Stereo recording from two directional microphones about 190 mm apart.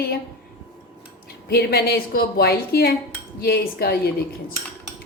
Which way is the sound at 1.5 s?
55° left (ahead or behind).